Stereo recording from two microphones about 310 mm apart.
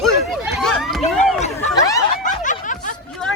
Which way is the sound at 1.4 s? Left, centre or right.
Left.